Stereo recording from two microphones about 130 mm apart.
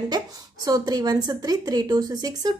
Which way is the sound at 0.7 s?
30° right (ahead or behind).